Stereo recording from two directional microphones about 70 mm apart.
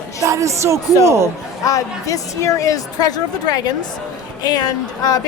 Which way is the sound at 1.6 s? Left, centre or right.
Left.